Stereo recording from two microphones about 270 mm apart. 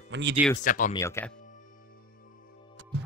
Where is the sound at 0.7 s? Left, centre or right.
Left.